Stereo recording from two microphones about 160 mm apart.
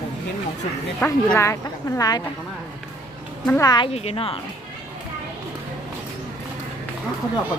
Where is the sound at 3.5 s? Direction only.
20° left (ahead or behind).